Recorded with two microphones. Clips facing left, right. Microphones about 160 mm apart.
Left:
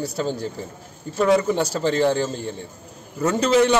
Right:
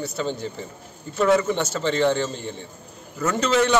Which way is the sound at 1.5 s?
35° left (ahead or behind).